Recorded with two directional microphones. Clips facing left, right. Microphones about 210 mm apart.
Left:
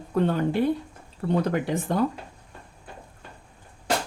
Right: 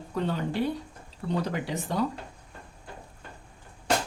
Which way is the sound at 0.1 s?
55° left (ahead or behind).